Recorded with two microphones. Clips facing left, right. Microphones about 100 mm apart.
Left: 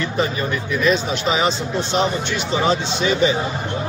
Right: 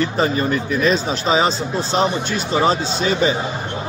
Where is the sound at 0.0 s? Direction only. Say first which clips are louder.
Right 3 dB; 35° right (ahead or behind).